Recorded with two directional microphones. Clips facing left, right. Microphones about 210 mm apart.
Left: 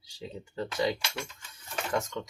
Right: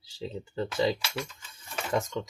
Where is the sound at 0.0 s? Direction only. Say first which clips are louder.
Right 4 dB; 30° right (ahead or behind).